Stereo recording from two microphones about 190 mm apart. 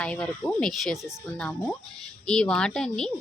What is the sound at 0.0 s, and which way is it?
A woman's voice, 5° left (ahead or behind).